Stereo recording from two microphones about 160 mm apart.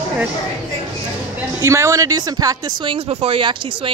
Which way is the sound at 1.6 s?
15° right (ahead or behind).